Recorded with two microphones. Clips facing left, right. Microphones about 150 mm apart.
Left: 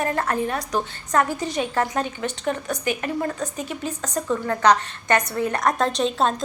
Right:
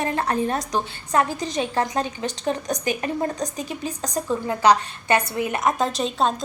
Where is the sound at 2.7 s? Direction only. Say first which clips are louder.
Even; 20° right (ahead or behind).